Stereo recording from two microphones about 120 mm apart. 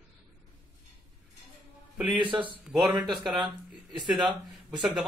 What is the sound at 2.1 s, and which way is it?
Speech, 45° right (ahead or behind).